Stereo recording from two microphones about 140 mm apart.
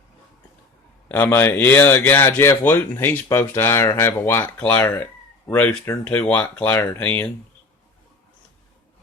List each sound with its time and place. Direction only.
1.0 s speech: 15° left (ahead or behind)